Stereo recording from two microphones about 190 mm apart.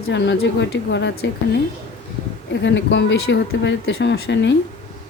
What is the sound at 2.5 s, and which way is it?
Speech, 70° left (ahead or behind).